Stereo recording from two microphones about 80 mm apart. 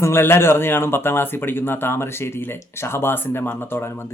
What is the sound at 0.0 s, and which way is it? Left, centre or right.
Speech, left.